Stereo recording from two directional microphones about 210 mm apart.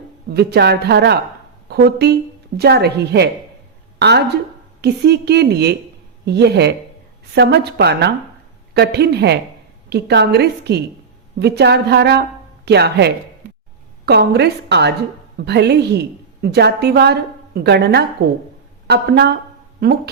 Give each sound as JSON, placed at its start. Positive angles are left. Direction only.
{"t": 0.3, "sound": "a woman's voice", "side_deg": -50}